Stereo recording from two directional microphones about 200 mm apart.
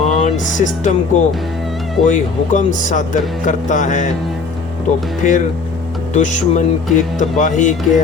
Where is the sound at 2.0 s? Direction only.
35° left (ahead or behind).